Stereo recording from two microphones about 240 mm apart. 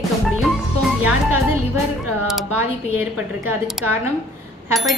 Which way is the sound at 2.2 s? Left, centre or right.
Centre.